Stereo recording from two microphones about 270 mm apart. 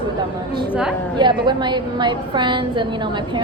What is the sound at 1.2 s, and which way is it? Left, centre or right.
A woman's voice, centre.